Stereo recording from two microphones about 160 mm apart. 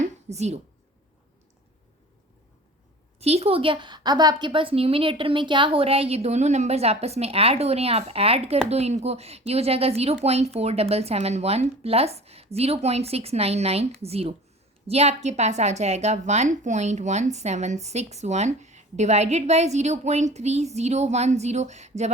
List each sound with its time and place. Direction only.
0.3 s a woman's voice: 45° right (ahead or behind)
3.2 s a woman's voice: 40° right (ahead or behind)